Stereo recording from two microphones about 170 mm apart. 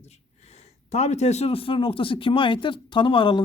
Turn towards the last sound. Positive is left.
turn(degrees=30)  # may be behind; listen again after turning